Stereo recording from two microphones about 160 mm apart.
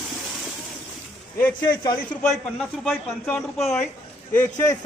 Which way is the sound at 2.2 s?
Centre (ahead or behind).